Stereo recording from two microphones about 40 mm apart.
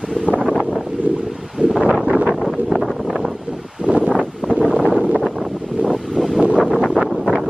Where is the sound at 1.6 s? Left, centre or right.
Right.